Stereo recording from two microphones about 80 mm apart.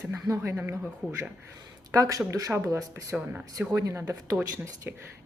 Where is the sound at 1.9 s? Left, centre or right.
Right.